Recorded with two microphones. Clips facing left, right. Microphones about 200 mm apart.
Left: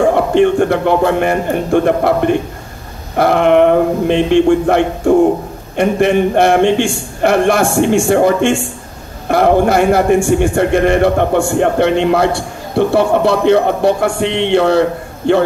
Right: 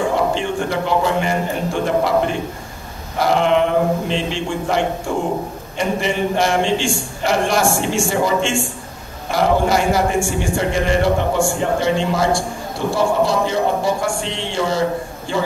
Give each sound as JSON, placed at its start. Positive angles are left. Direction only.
{"t": 0.1, "sound": "a man's voice", "side_deg": 60}